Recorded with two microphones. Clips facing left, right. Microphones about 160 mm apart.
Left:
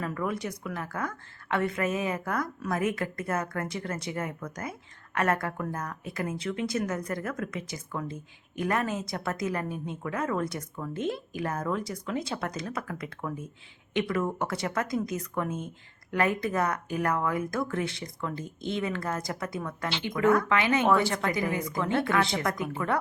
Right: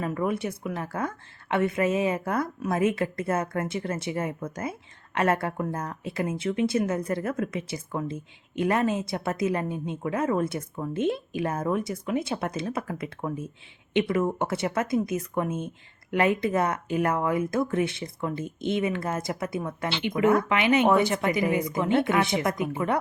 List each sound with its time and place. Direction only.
0.0 s a woman's voice: 25° right (ahead or behind)